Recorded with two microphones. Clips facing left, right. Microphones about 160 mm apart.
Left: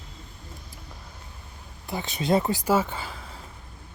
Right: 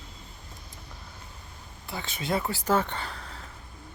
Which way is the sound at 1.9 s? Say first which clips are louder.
Left 6 dB; 20° left (ahead or behind).